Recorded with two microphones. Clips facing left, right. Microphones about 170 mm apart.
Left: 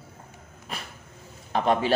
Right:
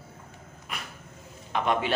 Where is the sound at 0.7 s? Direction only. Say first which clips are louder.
Left 2 dB; 30° left (ahead or behind).